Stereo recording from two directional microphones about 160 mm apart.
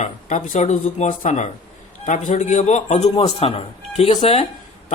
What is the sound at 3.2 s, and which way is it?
Speech, 35° left (ahead or behind).